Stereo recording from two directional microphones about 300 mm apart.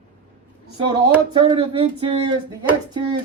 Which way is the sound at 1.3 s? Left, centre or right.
Centre.